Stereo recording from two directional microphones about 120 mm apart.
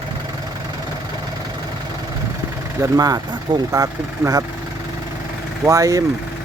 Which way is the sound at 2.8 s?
30° right (ahead or behind).